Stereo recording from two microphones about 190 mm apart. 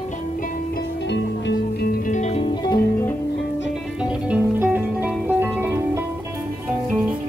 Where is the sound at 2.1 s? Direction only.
35° left (ahead or behind).